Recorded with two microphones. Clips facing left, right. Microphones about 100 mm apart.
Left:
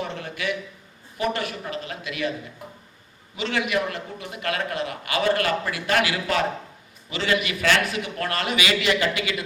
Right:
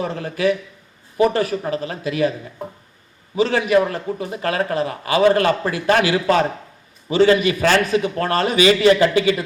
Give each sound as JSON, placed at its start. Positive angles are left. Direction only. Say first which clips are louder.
{"t": 0.0, "sound": "a man's voice", "louder": "right 9 dB", "side_deg": -35}
{"t": 3.3, "sound": "a man's voice", "louder": "right 9 dB", "side_deg": -35}